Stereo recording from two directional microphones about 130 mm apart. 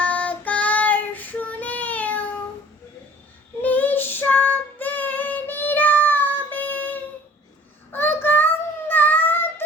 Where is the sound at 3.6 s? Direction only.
15° left (ahead or behind).